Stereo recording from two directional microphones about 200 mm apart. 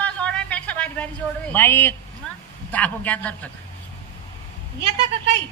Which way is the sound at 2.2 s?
5° left (ahead or behind).